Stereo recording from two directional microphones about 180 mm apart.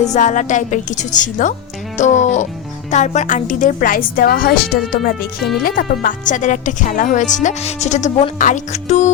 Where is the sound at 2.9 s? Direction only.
40° left (ahead or behind).